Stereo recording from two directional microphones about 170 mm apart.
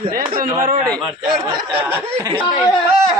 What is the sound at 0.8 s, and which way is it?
Speech, 5° left (ahead or behind).